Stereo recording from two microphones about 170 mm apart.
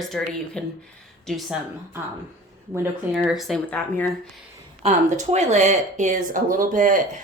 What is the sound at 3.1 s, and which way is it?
Speech, 5° right (ahead or behind).